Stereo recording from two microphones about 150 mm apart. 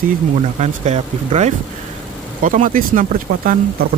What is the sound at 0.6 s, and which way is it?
Speech, 50° right (ahead or behind).